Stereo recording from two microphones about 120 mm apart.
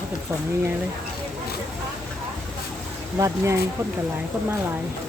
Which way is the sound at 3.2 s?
25° right (ahead or behind).